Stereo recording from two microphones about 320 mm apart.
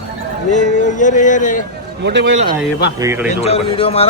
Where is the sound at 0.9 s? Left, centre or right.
Left.